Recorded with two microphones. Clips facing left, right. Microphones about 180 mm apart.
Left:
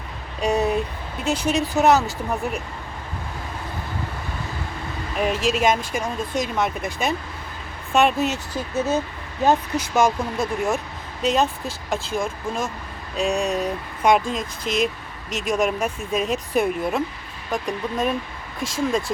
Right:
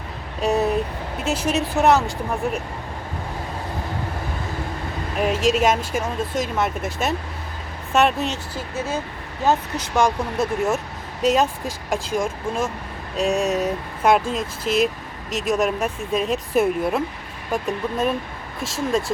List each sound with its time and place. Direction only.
0.4 s speech: centre (ahead or behind)
5.1 s speech: centre (ahead or behind)
8.5 s speech: 20° left (ahead or behind); by 19.1 s centre (ahead or behind)